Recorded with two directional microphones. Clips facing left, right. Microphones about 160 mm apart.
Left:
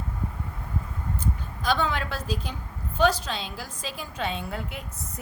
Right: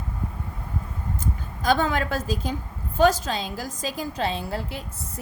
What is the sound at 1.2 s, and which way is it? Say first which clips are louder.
A woman's voice: right 3 dB; 45° right (ahead or behind).